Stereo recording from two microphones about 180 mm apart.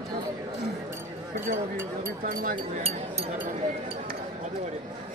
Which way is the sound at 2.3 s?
50° right (ahead or behind).